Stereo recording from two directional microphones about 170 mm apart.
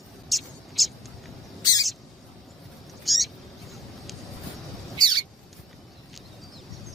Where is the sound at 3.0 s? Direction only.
Centre (ahead or behind).